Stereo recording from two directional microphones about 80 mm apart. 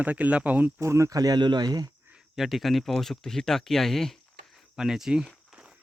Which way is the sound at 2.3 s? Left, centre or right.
Centre.